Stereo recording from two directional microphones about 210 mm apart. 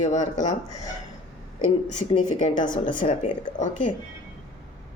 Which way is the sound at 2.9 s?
25° left (ahead or behind).